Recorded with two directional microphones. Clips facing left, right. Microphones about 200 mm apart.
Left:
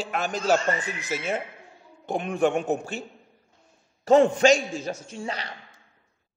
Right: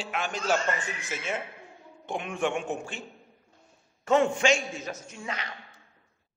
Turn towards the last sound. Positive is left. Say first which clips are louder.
# left 4 dB
turn(degrees=35)  # may be behind; listen again after turning